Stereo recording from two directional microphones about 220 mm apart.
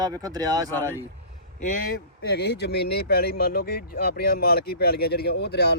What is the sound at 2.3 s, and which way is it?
Speech, 50° left (ahead or behind).